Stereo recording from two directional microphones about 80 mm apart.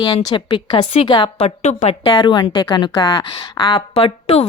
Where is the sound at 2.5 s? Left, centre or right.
Left.